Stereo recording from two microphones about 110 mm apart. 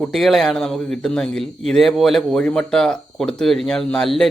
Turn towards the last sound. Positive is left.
turn(degrees=5)  # may be behind; listen again after turning